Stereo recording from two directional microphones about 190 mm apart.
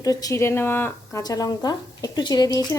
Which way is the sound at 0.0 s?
15° left (ahead or behind).